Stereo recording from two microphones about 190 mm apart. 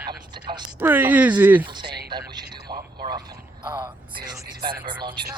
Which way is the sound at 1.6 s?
25° right (ahead or behind).